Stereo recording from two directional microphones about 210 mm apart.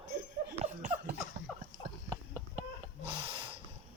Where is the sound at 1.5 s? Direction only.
5° left (ahead or behind).